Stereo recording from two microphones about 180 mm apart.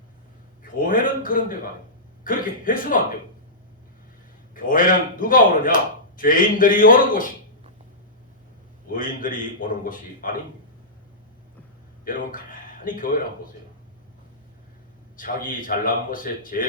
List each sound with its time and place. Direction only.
0.9 s a man's voice: 50° left (ahead or behind)
4.5 s a man's voice: 50° left (ahead or behind)
8.9 s a man's voice: 50° left (ahead or behind)
12.0 s speech: 50° left (ahead or behind)
15.1 s a man's voice: 50° left (ahead or behind)